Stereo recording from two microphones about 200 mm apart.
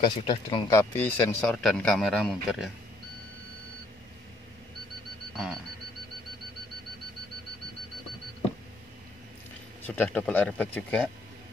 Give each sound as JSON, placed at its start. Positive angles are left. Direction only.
{"t": 0.0, "sound": "speech", "side_deg": 25}
{"t": 0.7, "sound": "speech", "side_deg": 10}
{"t": 9.8, "sound": "speech", "side_deg": 10}